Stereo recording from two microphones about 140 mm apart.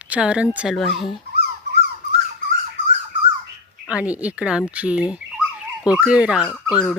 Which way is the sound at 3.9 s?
10° right (ahead or behind).